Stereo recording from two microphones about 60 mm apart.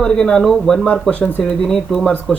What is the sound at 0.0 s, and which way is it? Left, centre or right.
Speech, centre.